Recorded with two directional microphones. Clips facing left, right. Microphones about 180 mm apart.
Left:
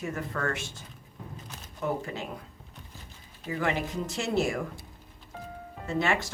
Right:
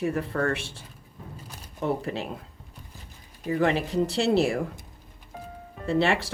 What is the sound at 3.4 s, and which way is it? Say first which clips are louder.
Speech: right 6 dB; 35° right (ahead or behind).